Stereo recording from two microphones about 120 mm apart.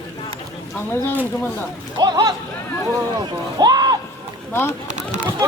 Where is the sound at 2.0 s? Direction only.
35° right (ahead or behind).